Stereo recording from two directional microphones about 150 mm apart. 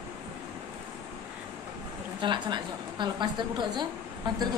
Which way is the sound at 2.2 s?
30° right (ahead or behind).